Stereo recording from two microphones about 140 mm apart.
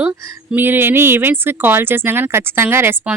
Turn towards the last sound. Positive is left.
turn(degrees=-15)  # may be behind; listen again after turning